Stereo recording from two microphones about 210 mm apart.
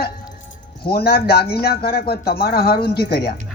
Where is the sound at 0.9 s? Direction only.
45° left (ahead or behind).